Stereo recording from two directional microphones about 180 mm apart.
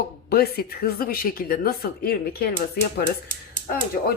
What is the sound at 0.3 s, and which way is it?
A woman's voice, 60° left (ahead or behind).